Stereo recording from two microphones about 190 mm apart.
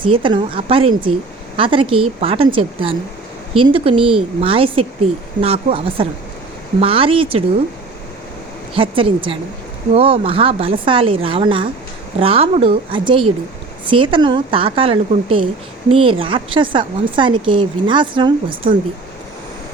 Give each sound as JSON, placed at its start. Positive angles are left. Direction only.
{"t": 0.0, "sound": "a woman's voice", "side_deg": -25}
{"t": 8.7, "sound": "a woman's voice", "side_deg": -30}